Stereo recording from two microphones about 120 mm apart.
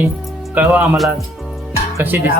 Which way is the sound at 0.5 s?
10° right (ahead or behind).